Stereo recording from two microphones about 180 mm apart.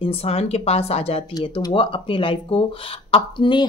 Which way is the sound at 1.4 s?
20° left (ahead or behind).